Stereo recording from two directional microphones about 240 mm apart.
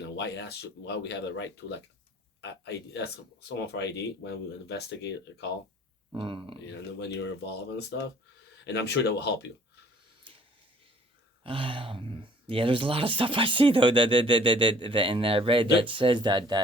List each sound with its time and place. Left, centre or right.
0.2 s speech: left
6.1 s speech: right
7.3 s speech: left
11.4 s speech: right